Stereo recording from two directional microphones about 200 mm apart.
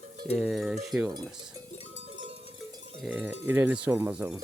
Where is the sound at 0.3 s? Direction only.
Centre (ahead or behind).